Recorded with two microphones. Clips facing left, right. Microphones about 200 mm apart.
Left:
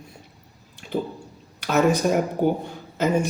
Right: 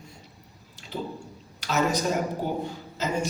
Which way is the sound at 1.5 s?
55° left (ahead or behind).